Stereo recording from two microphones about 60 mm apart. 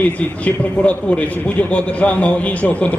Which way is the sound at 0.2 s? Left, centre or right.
Left.